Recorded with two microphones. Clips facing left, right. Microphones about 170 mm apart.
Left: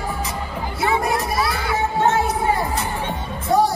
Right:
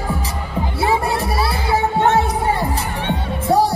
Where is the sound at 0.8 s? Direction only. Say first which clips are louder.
Right 1 dB; 30° right (ahead or behind).